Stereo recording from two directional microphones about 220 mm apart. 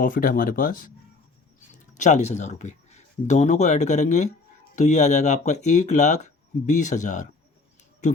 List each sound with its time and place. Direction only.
0.0 s speech: 40° left (ahead or behind)
2.0 s speech: 30° left (ahead or behind)